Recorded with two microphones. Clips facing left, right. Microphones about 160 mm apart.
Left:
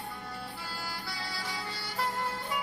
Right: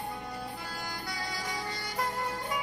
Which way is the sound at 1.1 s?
20° right (ahead or behind).